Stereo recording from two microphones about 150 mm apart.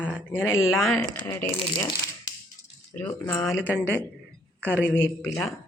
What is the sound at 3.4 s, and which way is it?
Speech, 5° right (ahead or behind).